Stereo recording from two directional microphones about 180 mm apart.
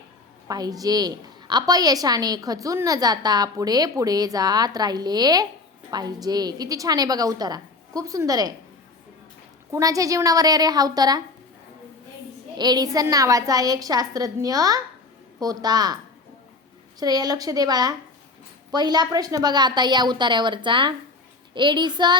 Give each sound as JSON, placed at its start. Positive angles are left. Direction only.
{"t": 0.4, "sound": "a woman's voice", "side_deg": -20}
{"t": 9.7, "sound": "a woman's voice", "side_deg": -20}
{"t": 12.5, "sound": "a woman's voice", "side_deg": -20}
{"t": 17.0, "sound": "a woman's voice", "side_deg": -20}